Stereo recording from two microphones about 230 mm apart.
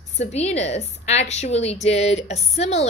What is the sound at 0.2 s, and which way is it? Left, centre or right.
A woman's voice, left.